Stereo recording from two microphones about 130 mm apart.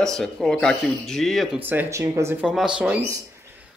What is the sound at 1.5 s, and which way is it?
Speech, 15° right (ahead or behind).